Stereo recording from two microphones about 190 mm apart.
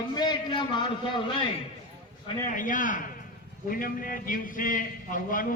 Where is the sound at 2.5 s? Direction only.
45° left (ahead or behind).